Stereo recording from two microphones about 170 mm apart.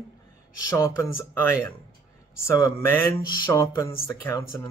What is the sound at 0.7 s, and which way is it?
Speech, 20° left (ahead or behind).